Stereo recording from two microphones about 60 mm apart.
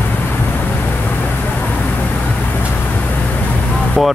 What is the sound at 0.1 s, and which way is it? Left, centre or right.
Vehicle, left.